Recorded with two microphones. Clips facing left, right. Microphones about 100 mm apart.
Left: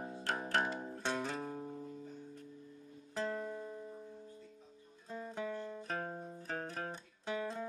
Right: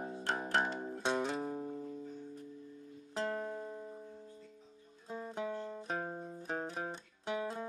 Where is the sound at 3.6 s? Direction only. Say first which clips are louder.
Right 1 dB; 25° right (ahead or behind).